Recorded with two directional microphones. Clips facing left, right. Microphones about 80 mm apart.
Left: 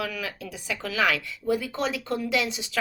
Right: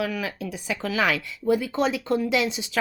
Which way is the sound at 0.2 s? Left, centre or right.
Right.